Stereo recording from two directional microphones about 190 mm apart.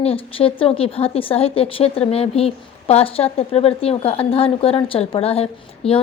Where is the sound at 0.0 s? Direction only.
30° left (ahead or behind).